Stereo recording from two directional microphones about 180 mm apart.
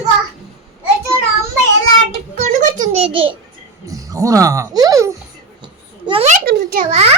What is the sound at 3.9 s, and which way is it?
Speech, 20° right (ahead or behind).